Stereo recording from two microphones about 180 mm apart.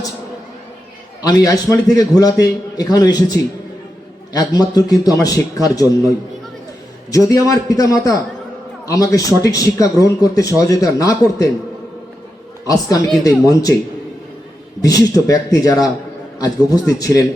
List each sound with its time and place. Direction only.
1.2 s a man's voice: 20° left (ahead or behind)
7.1 s a man's voice: 20° left (ahead or behind)
12.6 s a man's voice: 20° left (ahead or behind)
14.8 s a man's voice: 20° left (ahead or behind)